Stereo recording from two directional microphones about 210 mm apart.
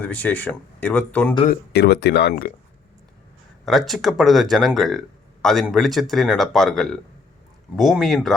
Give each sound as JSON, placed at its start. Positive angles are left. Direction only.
{"t": 0.0, "sound": "speech", "side_deg": 10}
{"t": 1.5, "sound": "speech", "side_deg": 50}
{"t": 3.7, "sound": "speech", "side_deg": 0}